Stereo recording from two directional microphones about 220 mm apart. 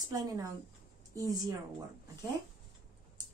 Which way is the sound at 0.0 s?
15° right (ahead or behind).